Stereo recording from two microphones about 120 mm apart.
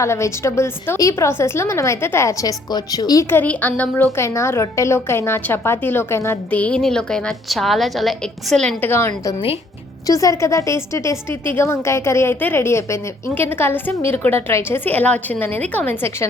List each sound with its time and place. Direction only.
0.0 s a woman's voice: 25° left (ahead or behind)
3.2 s a woman's voice: 15° left (ahead or behind)
8.8 s a woman's voice: 20° left (ahead or behind)